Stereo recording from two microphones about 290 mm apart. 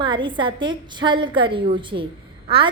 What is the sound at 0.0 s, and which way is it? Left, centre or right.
A woman's voice, centre.